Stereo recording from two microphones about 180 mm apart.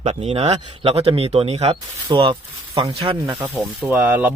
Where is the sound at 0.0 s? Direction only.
35° right (ahead or behind).